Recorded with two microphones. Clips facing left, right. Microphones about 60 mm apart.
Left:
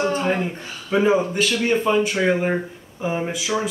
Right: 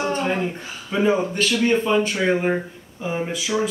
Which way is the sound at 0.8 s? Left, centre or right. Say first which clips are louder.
Left 2 dB; centre.